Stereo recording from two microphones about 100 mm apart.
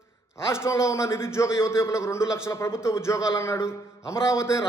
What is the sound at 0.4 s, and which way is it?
A man's voice, 25° left (ahead or behind).